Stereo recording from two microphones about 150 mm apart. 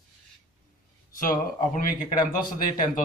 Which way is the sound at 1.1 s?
65° left (ahead or behind).